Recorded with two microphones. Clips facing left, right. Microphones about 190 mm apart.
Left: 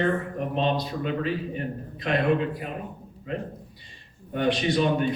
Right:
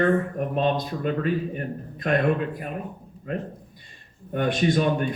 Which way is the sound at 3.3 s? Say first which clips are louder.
Right 1 dB; 50° right (ahead or behind).